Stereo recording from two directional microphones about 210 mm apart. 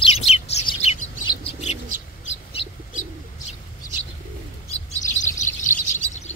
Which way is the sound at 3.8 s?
40° left (ahead or behind).